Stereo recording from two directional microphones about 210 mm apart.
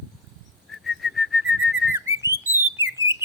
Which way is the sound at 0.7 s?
Centre (ahead or behind).